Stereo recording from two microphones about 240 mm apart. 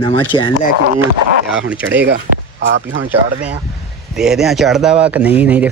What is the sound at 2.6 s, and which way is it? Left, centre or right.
Speech, right.